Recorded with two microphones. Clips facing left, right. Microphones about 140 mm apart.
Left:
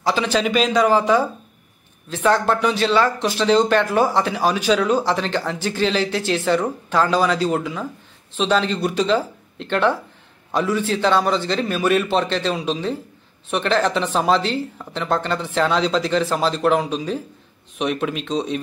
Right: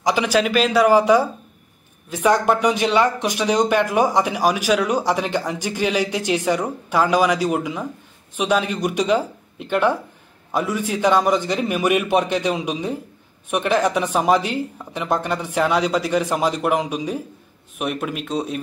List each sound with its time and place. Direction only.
0.0 s speech: 15° right (ahead or behind)